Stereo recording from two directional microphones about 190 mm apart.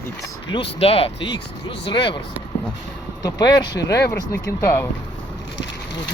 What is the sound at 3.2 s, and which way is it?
Speech, 20° left (ahead or behind).